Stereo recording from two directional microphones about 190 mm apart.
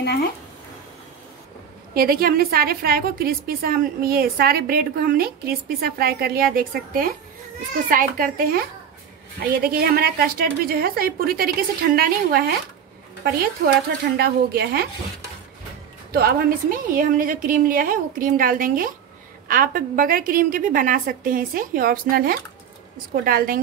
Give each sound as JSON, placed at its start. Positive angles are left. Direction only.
{"t": 0.0, "sound": "speech", "side_deg": 60}
{"t": 2.0, "sound": "a woman's voice", "side_deg": -50}
{"t": 16.1, "sound": "a woman's voice", "side_deg": -55}